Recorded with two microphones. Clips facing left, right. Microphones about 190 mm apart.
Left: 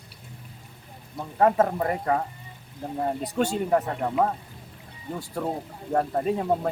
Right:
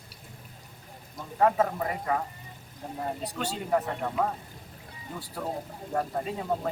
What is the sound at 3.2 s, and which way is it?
Speech, 50° left (ahead or behind).